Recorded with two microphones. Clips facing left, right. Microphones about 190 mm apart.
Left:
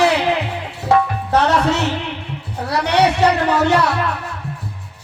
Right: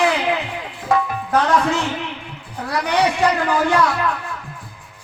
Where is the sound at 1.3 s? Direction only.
70° left (ahead or behind).